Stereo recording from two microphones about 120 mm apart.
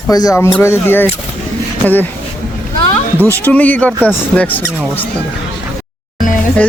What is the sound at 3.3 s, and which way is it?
Speech, 15° left (ahead or behind).